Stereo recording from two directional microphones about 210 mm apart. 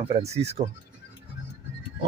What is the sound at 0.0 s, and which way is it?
Speech, 30° right (ahead or behind).